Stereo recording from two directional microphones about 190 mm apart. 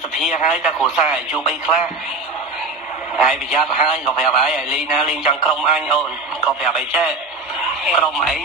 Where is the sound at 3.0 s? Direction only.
5° right (ahead or behind).